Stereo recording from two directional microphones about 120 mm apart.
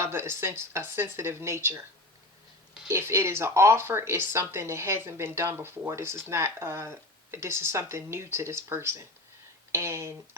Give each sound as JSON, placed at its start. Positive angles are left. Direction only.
{"t": 0.0, "sound": "speech", "side_deg": -20}
{"t": 2.9, "sound": "speech", "side_deg": -20}